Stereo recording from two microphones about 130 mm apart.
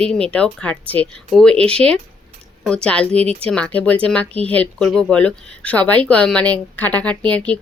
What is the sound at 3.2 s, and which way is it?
Speech, 50° right (ahead or behind).